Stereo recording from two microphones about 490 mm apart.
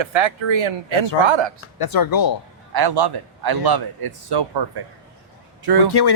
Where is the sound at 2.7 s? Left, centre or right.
Right.